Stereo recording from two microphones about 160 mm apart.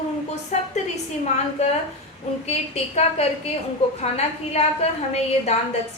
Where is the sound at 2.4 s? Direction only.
40° left (ahead or behind).